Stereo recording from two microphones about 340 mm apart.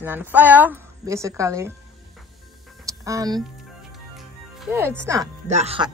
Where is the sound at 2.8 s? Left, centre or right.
Centre.